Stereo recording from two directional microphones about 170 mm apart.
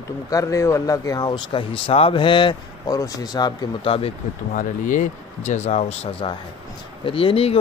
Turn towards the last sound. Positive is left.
turn(degrees=35)  # may be behind; listen again after turning